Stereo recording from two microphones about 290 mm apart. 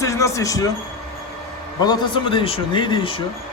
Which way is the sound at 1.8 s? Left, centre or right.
Centre.